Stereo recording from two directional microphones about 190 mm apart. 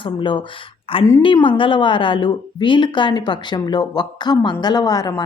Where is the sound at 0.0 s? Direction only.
25° left (ahead or behind).